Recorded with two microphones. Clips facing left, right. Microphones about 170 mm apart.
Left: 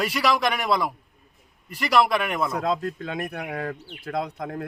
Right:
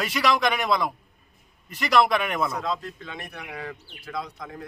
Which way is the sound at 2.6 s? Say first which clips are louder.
Left 5 dB; 50° left (ahead or behind).